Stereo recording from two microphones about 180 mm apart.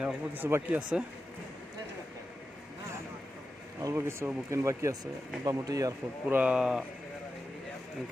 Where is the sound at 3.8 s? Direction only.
15° right (ahead or behind).